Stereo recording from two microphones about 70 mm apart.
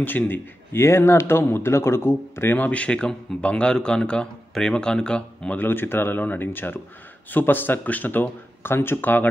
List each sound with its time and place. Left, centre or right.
0.0 s speech: left
5.6 s speech: left